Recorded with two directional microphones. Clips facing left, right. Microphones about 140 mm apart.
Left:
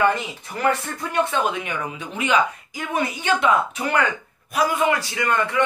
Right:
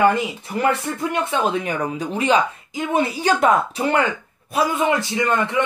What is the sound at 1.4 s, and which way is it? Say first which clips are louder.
Speech: right 4 dB; 35° right (ahead or behind).